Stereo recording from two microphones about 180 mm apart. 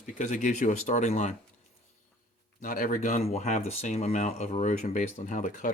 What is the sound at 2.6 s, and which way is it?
Speech, 50° left (ahead or behind).